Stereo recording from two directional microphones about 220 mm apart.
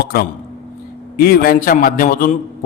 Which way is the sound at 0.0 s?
45° left (ahead or behind).